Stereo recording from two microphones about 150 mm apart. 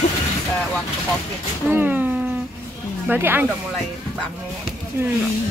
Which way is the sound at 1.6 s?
10° right (ahead or behind).